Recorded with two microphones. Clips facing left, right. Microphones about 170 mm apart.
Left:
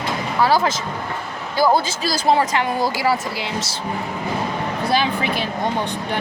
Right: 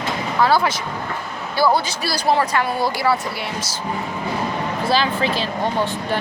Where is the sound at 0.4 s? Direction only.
35° left (ahead or behind).